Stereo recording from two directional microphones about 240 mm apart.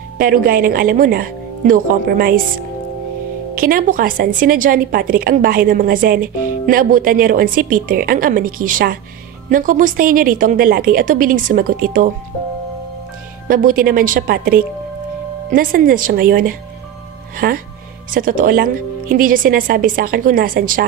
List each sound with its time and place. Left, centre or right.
0.2 s speech: right
3.5 s speech: right
13.5 s speech: right